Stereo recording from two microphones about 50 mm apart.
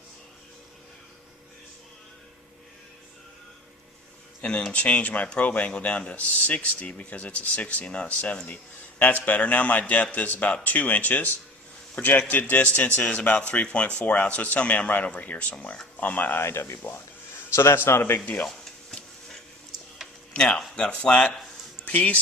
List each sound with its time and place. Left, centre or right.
4.4 s a man's voice: left
16.4 s a man's voice: left
17.5 s a man's voice: left
18.4 s a sound: centre
20.3 s speech: centre